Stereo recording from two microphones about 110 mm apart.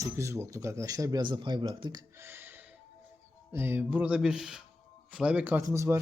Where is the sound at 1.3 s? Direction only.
45° right (ahead or behind).